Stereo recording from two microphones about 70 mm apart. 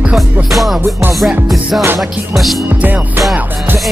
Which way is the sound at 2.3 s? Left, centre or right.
Centre.